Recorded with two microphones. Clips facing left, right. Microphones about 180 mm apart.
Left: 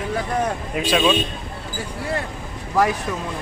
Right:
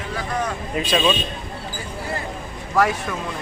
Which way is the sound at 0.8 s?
5° left (ahead or behind).